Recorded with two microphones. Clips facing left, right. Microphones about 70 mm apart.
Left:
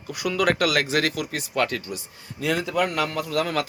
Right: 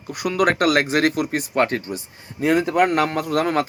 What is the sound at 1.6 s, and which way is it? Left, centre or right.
Speech, right.